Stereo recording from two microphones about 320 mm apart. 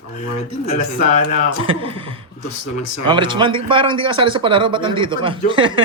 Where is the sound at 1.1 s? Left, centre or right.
Left.